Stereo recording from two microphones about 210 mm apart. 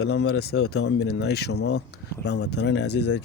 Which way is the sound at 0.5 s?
65° left (ahead or behind).